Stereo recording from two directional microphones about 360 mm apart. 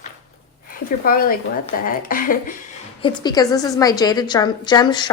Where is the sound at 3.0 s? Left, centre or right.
Centre.